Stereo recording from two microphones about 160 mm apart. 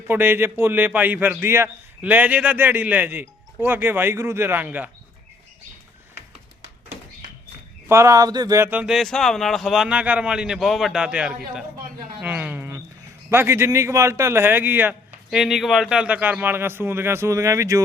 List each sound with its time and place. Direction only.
0.1 s a man's voice: 15° right (ahead or behind)
7.9 s a man's voice: 20° right (ahead or behind)